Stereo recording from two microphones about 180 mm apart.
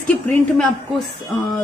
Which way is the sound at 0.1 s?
5° left (ahead or behind).